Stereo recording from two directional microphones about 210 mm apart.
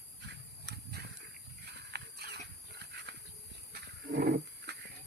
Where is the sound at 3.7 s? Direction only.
50° right (ahead or behind).